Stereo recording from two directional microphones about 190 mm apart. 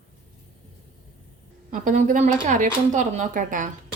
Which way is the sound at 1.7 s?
45° right (ahead or behind).